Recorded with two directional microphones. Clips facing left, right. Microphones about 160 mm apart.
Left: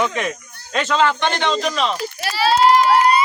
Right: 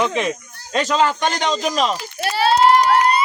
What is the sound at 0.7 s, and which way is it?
Speech, 35° right (ahead or behind).